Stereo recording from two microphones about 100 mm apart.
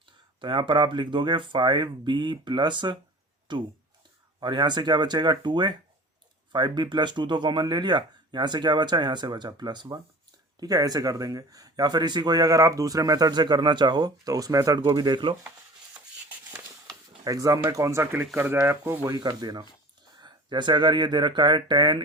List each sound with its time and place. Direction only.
0.4 s speech: 55° right (ahead or behind)
17.2 s speech: 35° right (ahead or behind)
19.1 s speech: 40° right (ahead or behind)